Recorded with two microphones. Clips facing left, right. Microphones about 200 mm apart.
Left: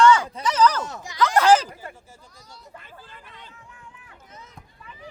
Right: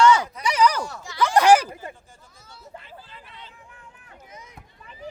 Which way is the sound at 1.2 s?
15° right (ahead or behind).